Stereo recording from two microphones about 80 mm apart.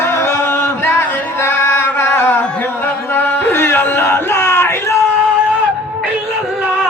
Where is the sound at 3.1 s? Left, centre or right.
Left.